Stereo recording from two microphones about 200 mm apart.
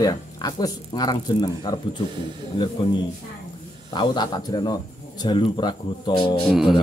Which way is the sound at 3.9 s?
20° left (ahead or behind).